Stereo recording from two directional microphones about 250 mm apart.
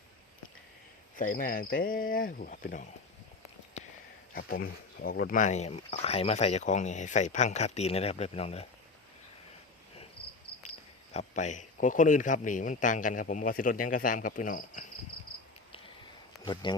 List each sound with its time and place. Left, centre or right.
1.1 s speech: left
3.8 s a sound: left
4.4 s speech: left
10.6 s speech: left